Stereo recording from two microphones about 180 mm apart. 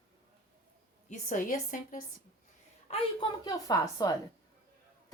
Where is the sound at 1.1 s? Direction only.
45° left (ahead or behind).